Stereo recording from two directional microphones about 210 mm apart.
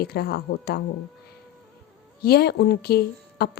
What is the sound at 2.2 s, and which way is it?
A woman's voice, 50° left (ahead or behind).